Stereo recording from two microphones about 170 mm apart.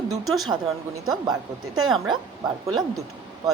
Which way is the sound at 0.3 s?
Centre (ahead or behind).